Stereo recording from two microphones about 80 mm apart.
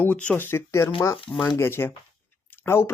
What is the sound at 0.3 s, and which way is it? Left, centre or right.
Speech, left.